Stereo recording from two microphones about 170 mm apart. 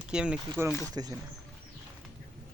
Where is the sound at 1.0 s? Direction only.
25° right (ahead or behind).